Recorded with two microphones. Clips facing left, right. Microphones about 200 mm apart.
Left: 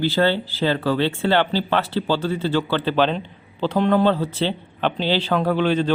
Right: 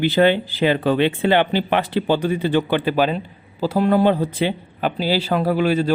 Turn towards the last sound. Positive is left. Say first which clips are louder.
# right 1 dB
turn(degrees=-10)  # may be behind; listen again after turning